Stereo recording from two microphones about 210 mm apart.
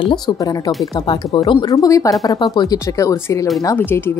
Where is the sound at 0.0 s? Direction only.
20° left (ahead or behind).